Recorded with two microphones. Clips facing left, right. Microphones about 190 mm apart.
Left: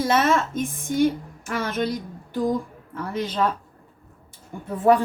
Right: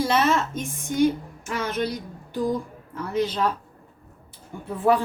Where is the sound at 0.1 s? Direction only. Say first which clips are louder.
Left 1 dB; 50° left (ahead or behind).